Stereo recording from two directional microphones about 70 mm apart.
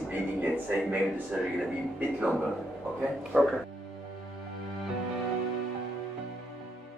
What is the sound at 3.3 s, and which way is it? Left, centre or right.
Speech, centre.